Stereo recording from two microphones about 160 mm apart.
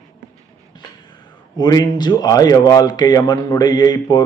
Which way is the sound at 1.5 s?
25° left (ahead or behind).